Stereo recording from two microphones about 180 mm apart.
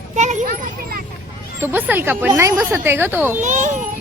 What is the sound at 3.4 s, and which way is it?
Speech, 45° right (ahead or behind).